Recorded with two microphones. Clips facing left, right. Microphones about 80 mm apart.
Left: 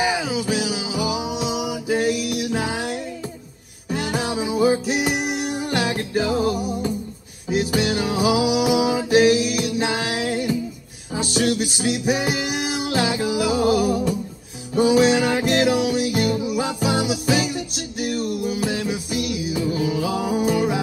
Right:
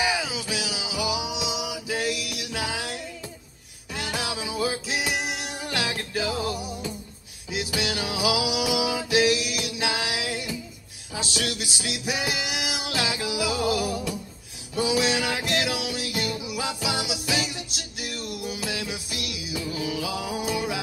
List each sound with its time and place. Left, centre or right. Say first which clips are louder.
0.0 s music: left 5 dB; left
3.9 s music: left 7 dB; left
6.3 s music: left 8 dB; centre
7.4 s music: left 8 dB; left